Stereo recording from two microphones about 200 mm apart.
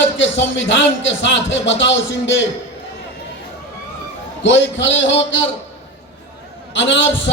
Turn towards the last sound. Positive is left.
turn(degrees=65)  # may be behind; listen again after turning